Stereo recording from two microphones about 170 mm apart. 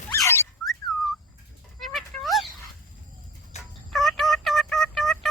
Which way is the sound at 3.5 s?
40° left (ahead or behind).